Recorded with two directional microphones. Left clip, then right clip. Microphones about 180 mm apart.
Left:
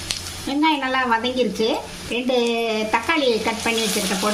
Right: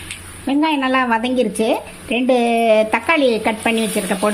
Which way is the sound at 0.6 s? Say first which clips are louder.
Right 2 dB; 45° right (ahead or behind).